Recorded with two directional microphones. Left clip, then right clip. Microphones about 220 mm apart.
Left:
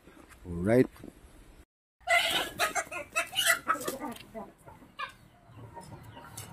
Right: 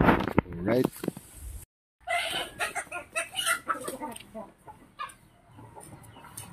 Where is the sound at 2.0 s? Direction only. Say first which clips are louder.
Left 3 dB; 40° left (ahead or behind).